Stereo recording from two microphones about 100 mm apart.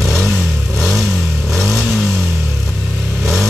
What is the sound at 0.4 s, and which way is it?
Vehicle, 15° right (ahead or behind).